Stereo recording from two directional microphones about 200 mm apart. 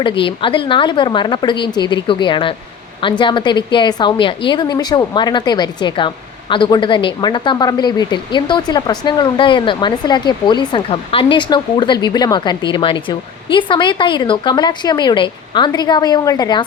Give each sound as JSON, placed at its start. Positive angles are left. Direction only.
{"t": 0.0, "sound": "a woman's voice", "side_deg": 25}